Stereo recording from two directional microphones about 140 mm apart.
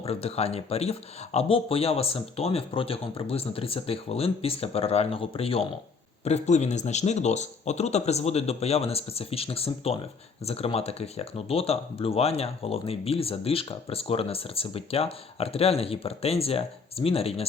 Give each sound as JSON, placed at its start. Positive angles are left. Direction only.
{"t": 0.0, "sound": "speech", "side_deg": 45}